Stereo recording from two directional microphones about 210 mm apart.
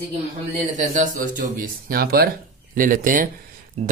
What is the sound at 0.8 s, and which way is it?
Speech, 40° right (ahead or behind).